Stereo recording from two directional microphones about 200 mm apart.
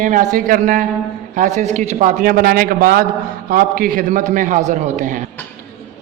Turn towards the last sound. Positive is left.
turn(degrees=-40)  # may be behind; listen again after turning